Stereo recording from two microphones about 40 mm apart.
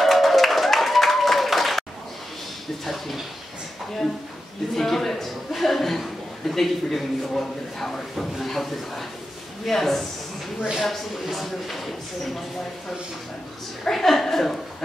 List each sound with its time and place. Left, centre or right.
0.0 s a sound: centre
4.7 s a woman's voice: centre
11.3 s speech: centre
13.8 s a woman's voice: centre